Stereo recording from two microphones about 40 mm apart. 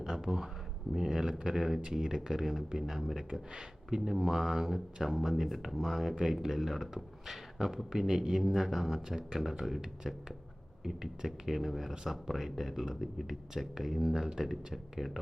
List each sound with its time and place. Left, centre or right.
0.0 s a sound: centre
0.9 s speech: centre
1.3 s speech: right
1.5 s speech: centre
9.0 s speech: centre
10.8 s speech: centre